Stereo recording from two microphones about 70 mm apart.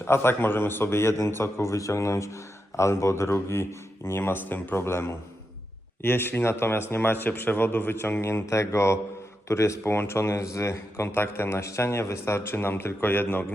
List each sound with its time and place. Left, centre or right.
0.0 s a man's voice: left